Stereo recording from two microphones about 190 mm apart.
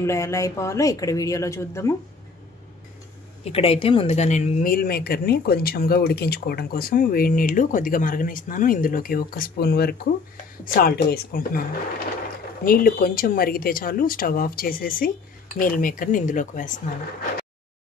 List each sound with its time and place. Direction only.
0.0 s speech: 15° left (ahead or behind)
3.4 s speech: 30° left (ahead or behind); by 11.6 s 50° left (ahead or behind)
12.6 s speech: 50° left (ahead or behind)